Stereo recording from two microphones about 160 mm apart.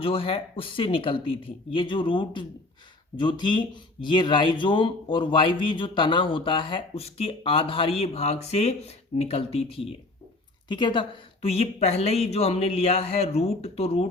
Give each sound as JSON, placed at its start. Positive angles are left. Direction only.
{"t": 0.0, "sound": "speech", "side_deg": 35}